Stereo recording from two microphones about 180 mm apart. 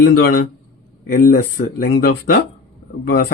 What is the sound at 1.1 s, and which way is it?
Speech, 50° left (ahead or behind).